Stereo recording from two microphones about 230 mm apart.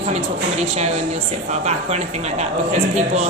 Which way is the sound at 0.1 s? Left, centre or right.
Right.